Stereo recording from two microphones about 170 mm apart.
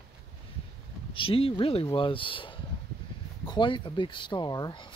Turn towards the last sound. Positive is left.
turn(degrees=25)  # may be behind; listen again after turning